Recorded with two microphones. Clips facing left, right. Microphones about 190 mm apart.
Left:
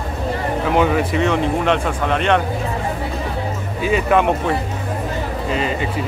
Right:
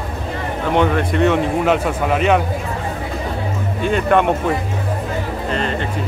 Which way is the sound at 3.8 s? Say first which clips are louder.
Even; 5° left (ahead or behind).